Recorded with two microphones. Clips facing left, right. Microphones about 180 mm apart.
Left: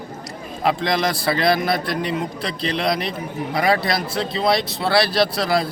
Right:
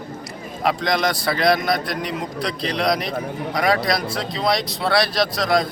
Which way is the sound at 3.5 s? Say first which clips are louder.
Left 1 dB; 25° left (ahead or behind).